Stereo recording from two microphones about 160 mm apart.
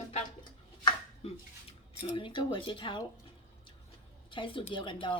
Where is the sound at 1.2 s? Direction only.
40° left (ahead or behind).